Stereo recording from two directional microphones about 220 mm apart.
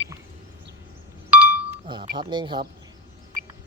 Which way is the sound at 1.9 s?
20° right (ahead or behind).